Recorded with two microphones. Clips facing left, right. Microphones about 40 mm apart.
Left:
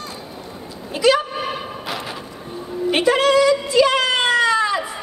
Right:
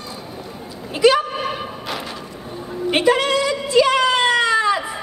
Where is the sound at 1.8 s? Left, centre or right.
Centre.